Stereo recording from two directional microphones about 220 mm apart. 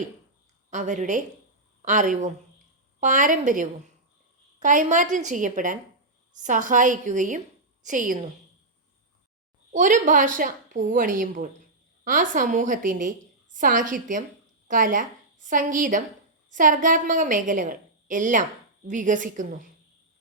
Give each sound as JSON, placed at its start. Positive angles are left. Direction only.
{"t": 0.7, "sound": "a woman's voice", "side_deg": -35}
{"t": 9.7, "sound": "a woman's voice", "side_deg": -35}